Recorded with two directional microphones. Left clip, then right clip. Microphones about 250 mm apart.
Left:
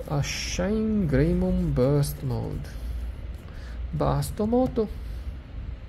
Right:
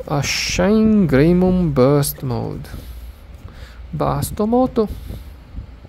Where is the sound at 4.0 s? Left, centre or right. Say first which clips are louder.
Right 7 dB; centre.